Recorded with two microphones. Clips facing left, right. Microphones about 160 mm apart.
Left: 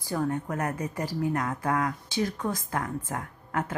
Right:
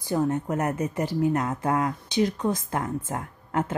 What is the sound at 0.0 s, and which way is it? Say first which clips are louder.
A woman's voice: right 4 dB; 20° right (ahead or behind).